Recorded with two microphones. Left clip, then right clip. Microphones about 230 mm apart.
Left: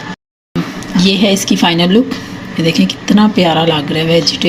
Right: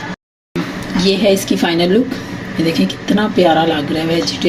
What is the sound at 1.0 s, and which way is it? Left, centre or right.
Speech, left.